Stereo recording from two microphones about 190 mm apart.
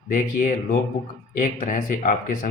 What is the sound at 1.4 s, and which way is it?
Speech, 45° left (ahead or behind).